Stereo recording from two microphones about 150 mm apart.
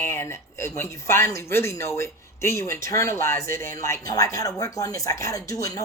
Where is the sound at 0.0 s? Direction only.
15° left (ahead or behind).